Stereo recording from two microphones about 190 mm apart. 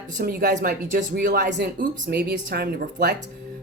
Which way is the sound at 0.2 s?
50° right (ahead or behind).